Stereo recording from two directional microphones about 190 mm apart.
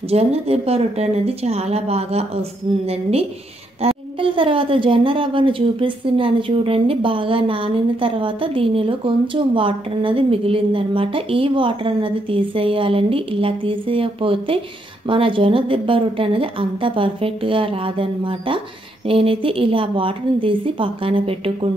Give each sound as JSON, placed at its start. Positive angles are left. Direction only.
{"t": 0.1, "sound": "a woman's voice", "side_deg": -30}